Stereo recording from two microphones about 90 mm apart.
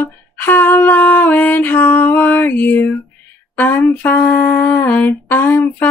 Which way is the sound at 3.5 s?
20° left (ahead or behind).